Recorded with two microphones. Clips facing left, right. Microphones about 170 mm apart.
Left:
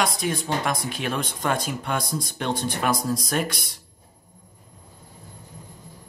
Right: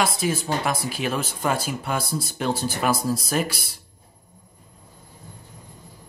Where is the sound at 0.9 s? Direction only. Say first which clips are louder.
Right 1 dB; 5° right (ahead or behind).